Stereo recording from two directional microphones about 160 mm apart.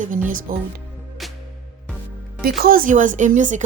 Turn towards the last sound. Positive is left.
turn(degrees=-50)  # may be behind; listen again after turning